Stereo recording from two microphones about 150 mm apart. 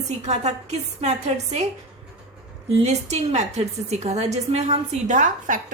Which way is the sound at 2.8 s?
45° right (ahead or behind).